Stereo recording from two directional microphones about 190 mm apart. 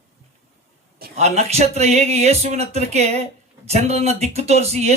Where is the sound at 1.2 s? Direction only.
35° right (ahead or behind).